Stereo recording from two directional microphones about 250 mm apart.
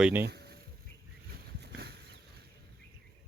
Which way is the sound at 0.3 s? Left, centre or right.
Right.